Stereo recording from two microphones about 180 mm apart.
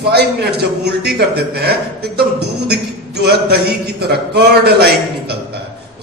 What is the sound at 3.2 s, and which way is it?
A man's voice, 65° right (ahead or behind).